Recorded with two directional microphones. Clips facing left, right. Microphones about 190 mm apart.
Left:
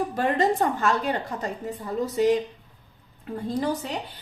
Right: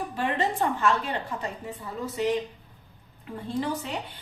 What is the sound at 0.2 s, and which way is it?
A woman's voice, 40° left (ahead or behind).